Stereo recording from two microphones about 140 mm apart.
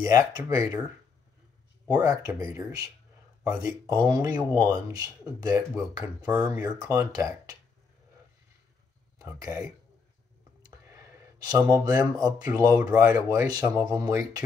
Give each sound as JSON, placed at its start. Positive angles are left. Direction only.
{"t": 0.0, "sound": "speech", "side_deg": -25}
{"t": 1.9, "sound": "speech", "side_deg": -25}
{"t": 6.2, "sound": "speech", "side_deg": -15}
{"t": 6.8, "sound": "speech", "side_deg": -25}
{"t": 9.2, "sound": "speech", "side_deg": -20}
{"t": 10.6, "sound": "a sound", "side_deg": -30}
{"t": 11.8, "sound": "speech", "side_deg": -25}